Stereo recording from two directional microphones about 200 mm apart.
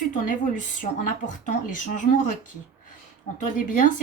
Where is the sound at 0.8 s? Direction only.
40° left (ahead or behind).